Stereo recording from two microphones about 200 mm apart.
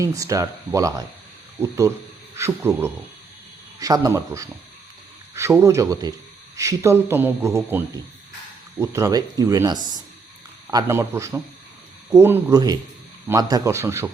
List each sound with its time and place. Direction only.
0.0 s a man's voice: 15° right (ahead or behind)